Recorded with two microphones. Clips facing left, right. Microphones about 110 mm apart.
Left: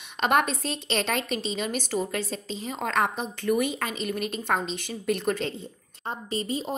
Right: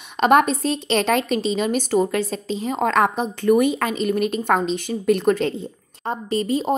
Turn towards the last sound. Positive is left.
turn(degrees=-60)  # may be behind; listen again after turning